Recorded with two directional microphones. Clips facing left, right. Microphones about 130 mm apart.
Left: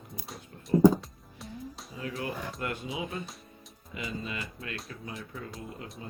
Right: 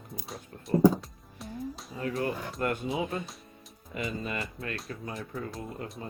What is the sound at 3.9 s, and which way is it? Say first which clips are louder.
Speech: right 3 dB; 50° right (ahead or behind).